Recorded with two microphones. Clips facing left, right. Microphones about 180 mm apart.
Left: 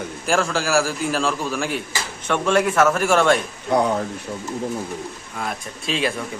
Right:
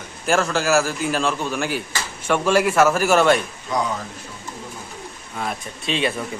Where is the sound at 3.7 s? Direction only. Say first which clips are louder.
Left 5 dB; 60° left (ahead or behind).